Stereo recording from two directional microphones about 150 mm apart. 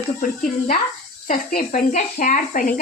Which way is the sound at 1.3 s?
65° left (ahead or behind).